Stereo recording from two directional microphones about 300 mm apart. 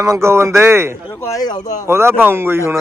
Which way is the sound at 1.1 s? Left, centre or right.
Centre.